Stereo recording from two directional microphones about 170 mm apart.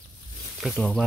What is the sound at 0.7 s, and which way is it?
Speech, 5° left (ahead or behind).